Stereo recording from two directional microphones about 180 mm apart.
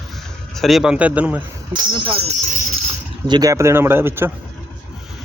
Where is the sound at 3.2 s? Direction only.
20° right (ahead or behind).